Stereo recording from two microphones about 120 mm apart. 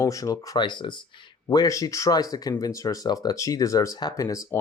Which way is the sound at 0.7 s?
40° left (ahead or behind).